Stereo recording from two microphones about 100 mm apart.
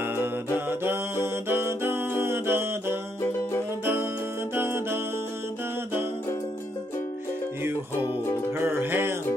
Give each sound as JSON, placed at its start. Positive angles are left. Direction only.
{"t": 0.7, "sound": "music", "side_deg": -20}
{"t": 8.5, "sound": "music", "side_deg": -20}